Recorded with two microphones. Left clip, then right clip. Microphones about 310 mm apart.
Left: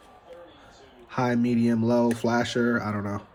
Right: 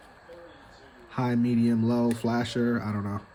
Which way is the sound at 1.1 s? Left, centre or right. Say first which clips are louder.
Left 3 dB; centre.